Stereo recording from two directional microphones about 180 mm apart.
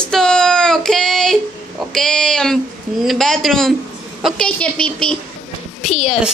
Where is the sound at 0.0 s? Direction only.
5° left (ahead or behind).